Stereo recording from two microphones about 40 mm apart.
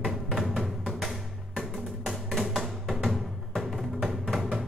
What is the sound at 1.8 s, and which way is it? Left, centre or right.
Music, centre.